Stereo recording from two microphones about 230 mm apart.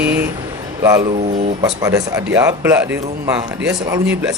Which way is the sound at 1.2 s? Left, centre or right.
Right.